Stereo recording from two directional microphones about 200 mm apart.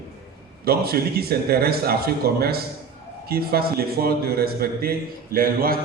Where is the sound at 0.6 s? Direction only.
50° right (ahead or behind).